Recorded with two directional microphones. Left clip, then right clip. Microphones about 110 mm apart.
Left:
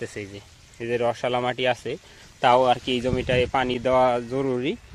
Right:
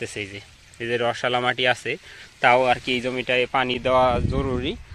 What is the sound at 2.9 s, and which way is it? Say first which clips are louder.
Speech: right 1 dB; 40° left (ahead or behind).